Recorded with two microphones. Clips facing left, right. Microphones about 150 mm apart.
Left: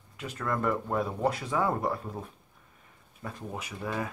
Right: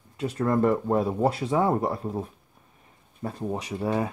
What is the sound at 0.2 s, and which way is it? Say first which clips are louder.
Speech: right 8 dB; 30° right (ahead or behind).